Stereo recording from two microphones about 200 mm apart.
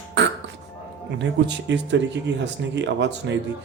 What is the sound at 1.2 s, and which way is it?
Speech, 60° right (ahead or behind).